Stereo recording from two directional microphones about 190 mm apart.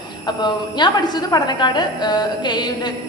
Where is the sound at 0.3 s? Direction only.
25° left (ahead or behind).